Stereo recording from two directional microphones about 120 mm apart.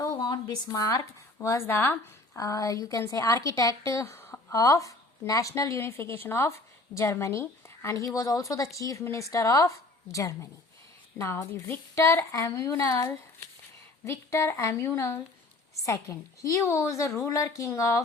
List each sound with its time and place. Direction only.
0.0 s a woman's voice: 30° left (ahead or behind)